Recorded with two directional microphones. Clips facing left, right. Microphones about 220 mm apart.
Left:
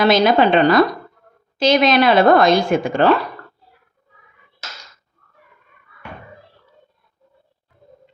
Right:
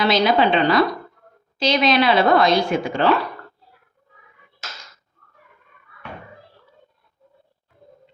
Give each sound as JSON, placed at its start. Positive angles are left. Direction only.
{"t": 0.0, "sound": "a woman's voice", "side_deg": 50}